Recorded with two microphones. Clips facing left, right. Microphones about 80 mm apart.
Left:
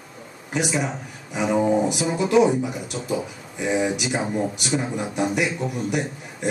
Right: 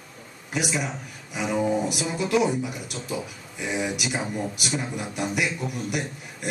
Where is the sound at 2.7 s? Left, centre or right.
Centre.